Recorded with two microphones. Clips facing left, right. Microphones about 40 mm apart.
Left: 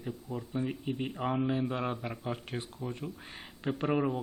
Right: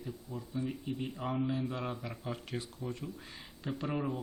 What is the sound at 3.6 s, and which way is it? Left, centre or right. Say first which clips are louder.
Speech: left 6 dB; left.